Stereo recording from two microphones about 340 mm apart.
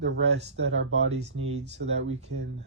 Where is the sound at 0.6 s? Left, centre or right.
Right.